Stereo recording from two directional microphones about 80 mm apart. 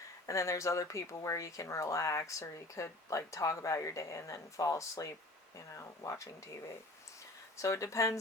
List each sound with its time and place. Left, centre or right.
0.3 s speech: left